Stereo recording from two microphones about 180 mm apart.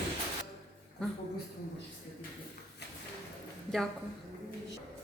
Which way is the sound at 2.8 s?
65° left (ahead or behind).